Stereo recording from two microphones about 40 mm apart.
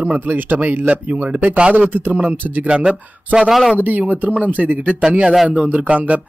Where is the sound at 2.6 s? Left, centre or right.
Right.